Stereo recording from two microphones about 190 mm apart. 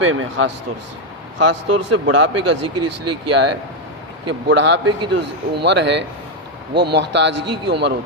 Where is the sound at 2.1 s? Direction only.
70° right (ahead or behind).